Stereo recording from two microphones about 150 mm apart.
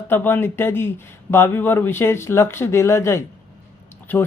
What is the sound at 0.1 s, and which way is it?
A man's voice, 15° left (ahead or behind).